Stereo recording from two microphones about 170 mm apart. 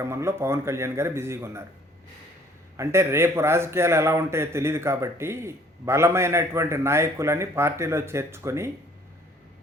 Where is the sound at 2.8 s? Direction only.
15° right (ahead or behind).